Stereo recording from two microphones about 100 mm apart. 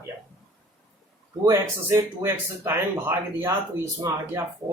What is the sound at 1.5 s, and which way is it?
Speech, 25° right (ahead or behind).